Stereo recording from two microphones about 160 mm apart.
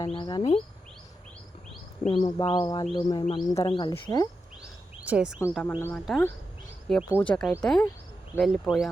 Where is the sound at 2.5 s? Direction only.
25° left (ahead or behind).